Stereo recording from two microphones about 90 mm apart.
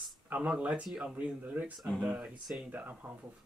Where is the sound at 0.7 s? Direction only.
5° right (ahead or behind).